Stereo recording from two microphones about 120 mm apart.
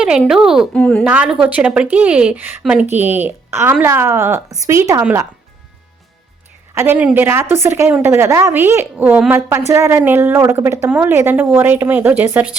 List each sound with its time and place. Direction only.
0.3 s speech: 5° right (ahead or behind)
0.7 s a woman's voice: 10° left (ahead or behind)
1.0 s a woman's voice: 10° right (ahead or behind)
6.7 s a woman's voice: 15° right (ahead or behind)